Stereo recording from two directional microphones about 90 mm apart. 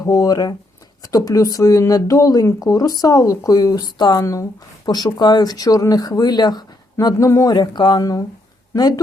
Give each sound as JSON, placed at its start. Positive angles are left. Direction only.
{"t": 0.0, "sound": "speech", "side_deg": 40}
{"t": 4.2, "sound": "speech", "side_deg": 35}
{"t": 4.9, "sound": "speech", "side_deg": 50}
{"t": 7.0, "sound": "speech", "side_deg": 35}
{"t": 7.5, "sound": "speech", "side_deg": 55}